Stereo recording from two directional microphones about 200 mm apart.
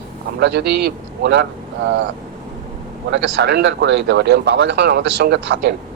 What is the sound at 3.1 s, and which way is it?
Speech, 60° right (ahead or behind).